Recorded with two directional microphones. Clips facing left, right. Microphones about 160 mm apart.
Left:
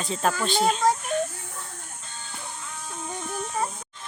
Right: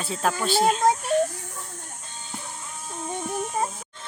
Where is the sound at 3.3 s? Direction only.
20° right (ahead or behind).